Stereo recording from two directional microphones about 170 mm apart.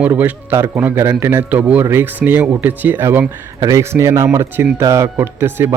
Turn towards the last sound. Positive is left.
turn(degrees=-15)  # may be behind; listen again after turning